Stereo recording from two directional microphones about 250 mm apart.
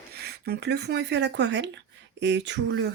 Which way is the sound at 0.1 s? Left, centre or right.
Right.